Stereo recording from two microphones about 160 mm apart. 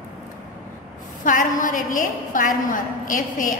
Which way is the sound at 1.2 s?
55° left (ahead or behind).